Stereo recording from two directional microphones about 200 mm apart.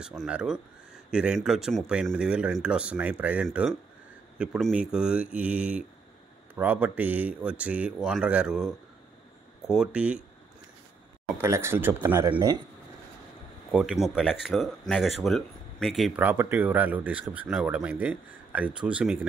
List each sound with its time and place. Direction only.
0.0 s speech: centre (ahead or behind)
11.2 s speech: 10° right (ahead or behind)
13.7 s speech: 5° right (ahead or behind)